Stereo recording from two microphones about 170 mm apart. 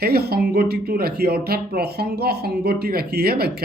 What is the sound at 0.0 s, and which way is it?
Speech, 70° right (ahead or behind).